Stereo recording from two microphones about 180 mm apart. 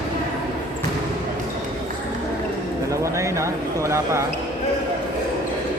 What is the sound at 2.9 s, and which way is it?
Speech, 15° right (ahead or behind).